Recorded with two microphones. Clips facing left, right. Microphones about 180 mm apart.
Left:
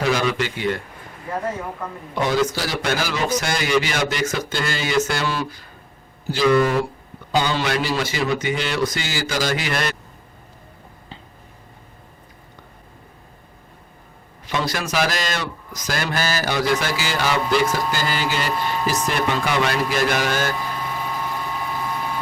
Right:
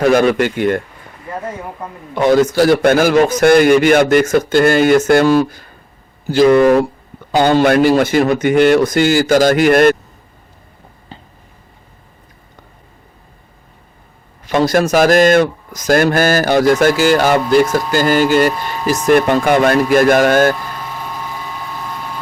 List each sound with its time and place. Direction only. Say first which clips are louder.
0.0 s a man's voice: right 9 dB; 55° right (ahead or behind)
2.1 s a man's voice: right 10 dB; 50° right (ahead or behind)
14.4 s a man's voice: right 12 dB; 50° right (ahead or behind)